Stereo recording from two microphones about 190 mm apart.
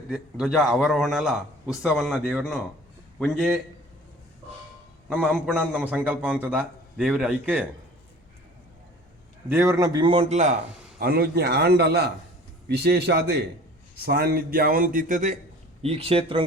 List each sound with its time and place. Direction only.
0.1 s a man's voice: centre (ahead or behind)
5.0 s a man's voice: 5° right (ahead or behind)
9.5 s a man's voice: 15° right (ahead or behind); by 10.5 s 35° right (ahead or behind)
11.0 s a man's voice: 55° right (ahead or behind)
15.8 s speech: 30° right (ahead or behind)